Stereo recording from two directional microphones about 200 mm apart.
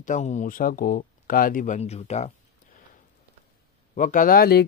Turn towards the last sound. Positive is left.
turn(degrees=50)  # may be behind; listen again after turning